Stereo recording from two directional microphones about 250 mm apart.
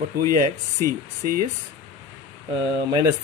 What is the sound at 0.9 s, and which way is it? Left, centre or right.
Speech, right.